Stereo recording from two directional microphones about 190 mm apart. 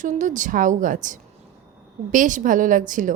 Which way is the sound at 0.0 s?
40° right (ahead or behind).